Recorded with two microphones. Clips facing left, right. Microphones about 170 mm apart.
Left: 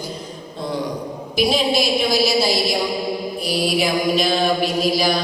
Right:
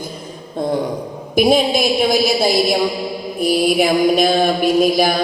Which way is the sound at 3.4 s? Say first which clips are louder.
Right 8 dB; 50° right (ahead or behind).